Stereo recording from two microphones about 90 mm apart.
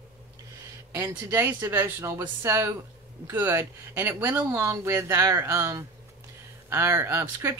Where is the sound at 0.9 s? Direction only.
25° right (ahead or behind).